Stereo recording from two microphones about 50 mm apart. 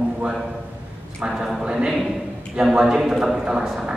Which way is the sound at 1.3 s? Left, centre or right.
Centre.